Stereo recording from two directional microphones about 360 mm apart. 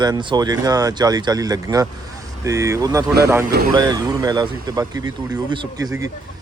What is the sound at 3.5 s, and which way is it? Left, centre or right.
Speech, right.